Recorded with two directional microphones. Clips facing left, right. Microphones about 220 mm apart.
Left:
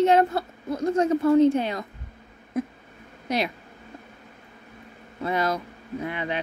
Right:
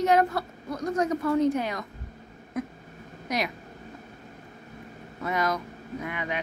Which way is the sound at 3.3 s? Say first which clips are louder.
Left 3 dB; 30° left (ahead or behind).